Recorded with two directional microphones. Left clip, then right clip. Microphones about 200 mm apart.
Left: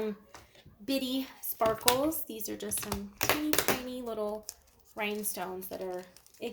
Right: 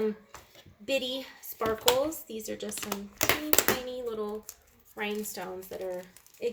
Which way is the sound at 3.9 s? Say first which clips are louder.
Right 1 dB; 35° left (ahead or behind).